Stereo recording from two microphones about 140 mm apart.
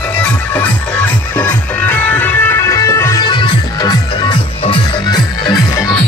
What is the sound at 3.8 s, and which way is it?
Music, 30° left (ahead or behind).